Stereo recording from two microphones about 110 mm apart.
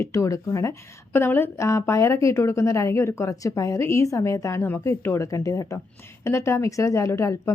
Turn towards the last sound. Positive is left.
turn(degrees=25)  # may be behind; listen again after turning